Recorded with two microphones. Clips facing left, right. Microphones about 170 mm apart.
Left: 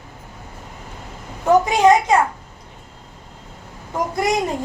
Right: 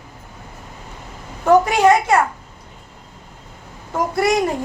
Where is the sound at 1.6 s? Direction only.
15° left (ahead or behind).